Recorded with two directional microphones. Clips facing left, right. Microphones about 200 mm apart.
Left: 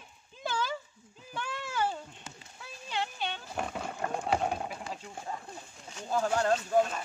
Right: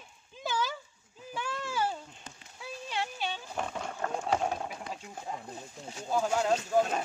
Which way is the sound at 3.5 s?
5° left (ahead or behind).